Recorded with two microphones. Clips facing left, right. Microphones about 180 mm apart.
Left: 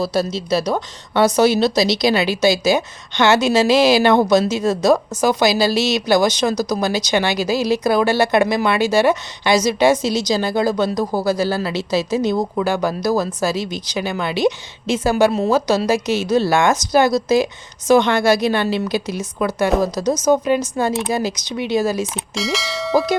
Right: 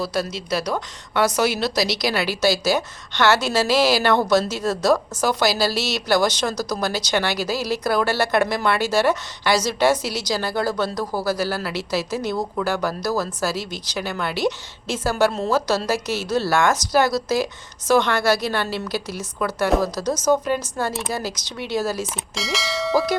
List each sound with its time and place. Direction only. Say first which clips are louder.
0.0 s speech: left 5 dB; 25° left (ahead or behind)
22.1 s bell: left 5 dB; centre (ahead or behind)